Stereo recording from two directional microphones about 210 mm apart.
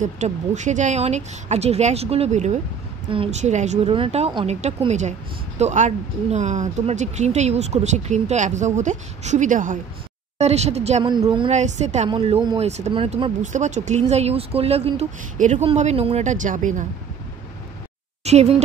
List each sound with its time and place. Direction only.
0.0 s speech: 35° right (ahead or behind)
18.2 s speech: 30° right (ahead or behind)